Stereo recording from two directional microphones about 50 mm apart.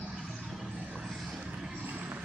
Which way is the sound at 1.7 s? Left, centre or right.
Right.